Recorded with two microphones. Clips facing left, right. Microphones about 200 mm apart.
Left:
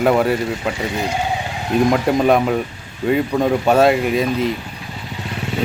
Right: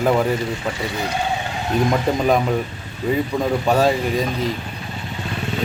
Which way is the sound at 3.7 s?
10° left (ahead or behind).